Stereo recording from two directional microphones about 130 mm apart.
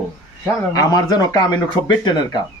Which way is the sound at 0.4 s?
25° left (ahead or behind).